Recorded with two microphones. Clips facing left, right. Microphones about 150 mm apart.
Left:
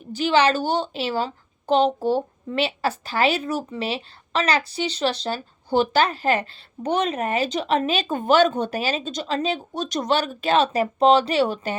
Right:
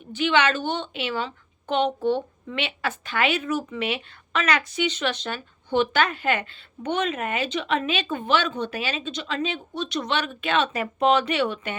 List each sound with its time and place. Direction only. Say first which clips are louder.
0.1 s a woman's voice: left 3 dB; 35° left (ahead or behind)